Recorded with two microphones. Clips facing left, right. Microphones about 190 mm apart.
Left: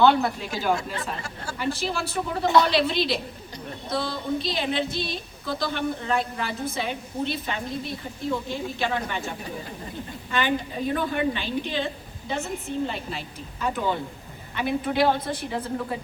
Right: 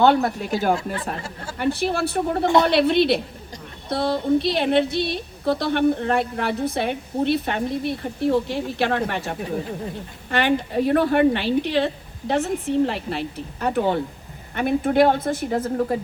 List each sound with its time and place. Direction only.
0.0 s a woman's voice: 45° right (ahead or behind); by 11.9 s 70° right (ahead or behind)
12.3 s a woman's voice: 90° right; by 13.9 s 60° right (ahead or behind)
14.5 s a woman's voice: 50° right (ahead or behind)